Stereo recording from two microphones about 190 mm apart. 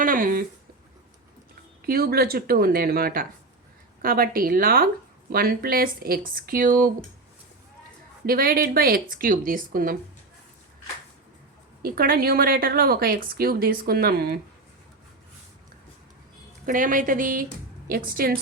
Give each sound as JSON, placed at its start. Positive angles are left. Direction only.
{"t": 0.0, "sound": "a sound", "side_deg": -45}
{"t": 1.9, "sound": "speech", "side_deg": -55}
{"t": 8.3, "sound": "speech", "side_deg": -50}
{"t": 11.8, "sound": "speech", "side_deg": -50}
{"t": 16.6, "sound": "speech", "side_deg": -45}